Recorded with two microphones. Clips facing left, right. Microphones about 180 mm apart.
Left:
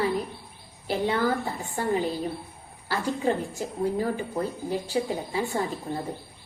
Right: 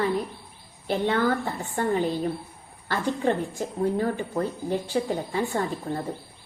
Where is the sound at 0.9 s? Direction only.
10° left (ahead or behind).